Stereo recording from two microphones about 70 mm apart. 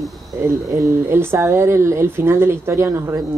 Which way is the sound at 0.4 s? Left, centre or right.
Right.